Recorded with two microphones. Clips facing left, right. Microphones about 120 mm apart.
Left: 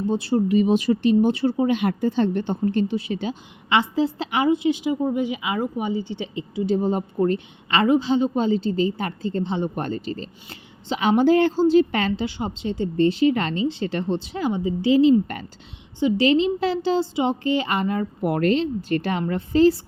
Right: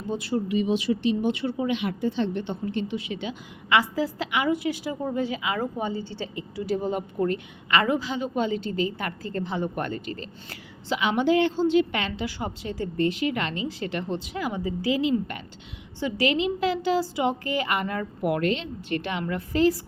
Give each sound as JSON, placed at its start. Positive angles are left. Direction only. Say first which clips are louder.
{"t": 0.1, "sound": "speech", "louder": "left 5 dB", "side_deg": 30}
{"t": 3.7, "sound": "a woman's voice", "louder": "left 3 dB", "side_deg": 25}
{"t": 11.0, "sound": "speech", "louder": "left 5 dB", "side_deg": 35}
{"t": 12.2, "sound": "a woman's voice", "louder": "left 4 dB", "side_deg": 25}
{"t": 16.0, "sound": "speech", "louder": "left 6 dB", "side_deg": 25}
{"t": 19.2, "sound": "speech", "louder": "left 5 dB", "side_deg": 30}